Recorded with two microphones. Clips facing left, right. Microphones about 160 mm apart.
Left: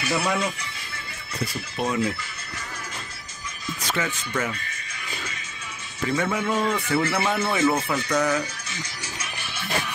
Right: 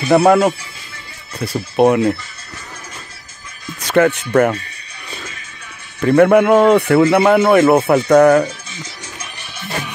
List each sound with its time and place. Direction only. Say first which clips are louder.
0.1 s a man's voice: right 15 dB; 65° right (ahead or behind)
3.8 s a man's voice: right 16 dB; 65° right (ahead or behind)
5.9 s a man's voice: right 15 dB; 60° right (ahead or behind)